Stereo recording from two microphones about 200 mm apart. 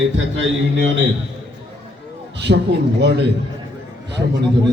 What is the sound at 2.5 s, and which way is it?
Speech, 55° right (ahead or behind).